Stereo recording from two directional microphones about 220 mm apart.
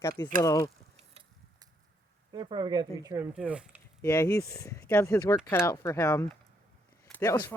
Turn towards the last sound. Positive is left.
turn(degrees=10)  # may be behind; listen again after turning